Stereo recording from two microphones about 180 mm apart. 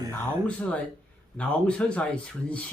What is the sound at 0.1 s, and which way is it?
Speech, 10° left (ahead or behind).